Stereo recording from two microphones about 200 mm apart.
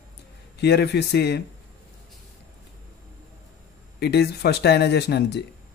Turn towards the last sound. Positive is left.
turn(degrees=55)  # may be behind; listen again after turning